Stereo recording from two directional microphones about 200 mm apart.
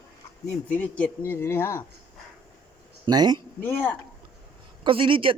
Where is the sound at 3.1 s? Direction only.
20° right (ahead or behind).